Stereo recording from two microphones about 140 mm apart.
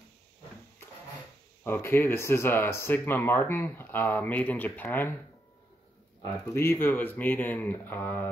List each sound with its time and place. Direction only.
1.6 s speech: 15° left (ahead or behind)
6.5 s speech: 15° left (ahead or behind)